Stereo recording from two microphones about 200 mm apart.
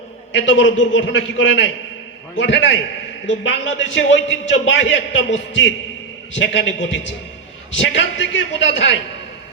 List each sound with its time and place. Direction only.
0.3 s a man's voice: 65° left (ahead or behind)